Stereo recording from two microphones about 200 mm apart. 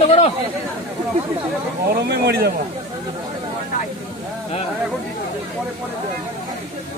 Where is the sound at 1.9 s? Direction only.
50° right (ahead or behind).